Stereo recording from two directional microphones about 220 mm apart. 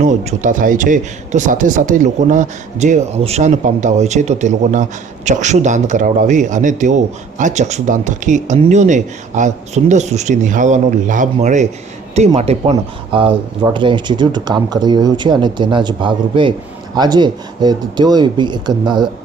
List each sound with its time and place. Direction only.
0.0 s a man's voice: 35° right (ahead or behind)